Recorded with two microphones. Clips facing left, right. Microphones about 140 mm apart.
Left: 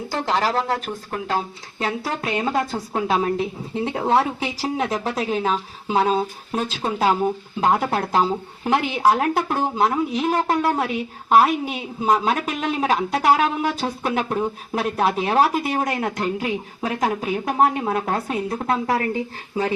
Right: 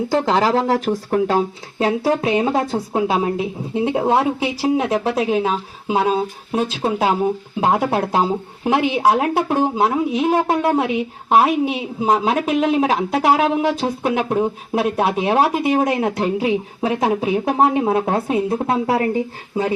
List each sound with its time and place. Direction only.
0.9 s speech: 55° right (ahead or behind)
1.3 s a woman's voice: 25° right (ahead or behind)
2.9 s a woman's voice: 15° right (ahead or behind)